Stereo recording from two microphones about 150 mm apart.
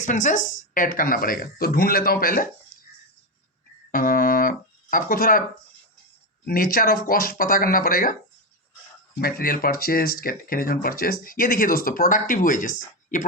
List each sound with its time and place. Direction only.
0.0 s speech: 60° left (ahead or behind); by 2.5 s 75° left (ahead or behind)
3.9 s speech: 70° left (ahead or behind)
6.4 s speech: 75° left (ahead or behind)
9.1 s speech: 80° left; by 13.2 s 60° left (ahead or behind)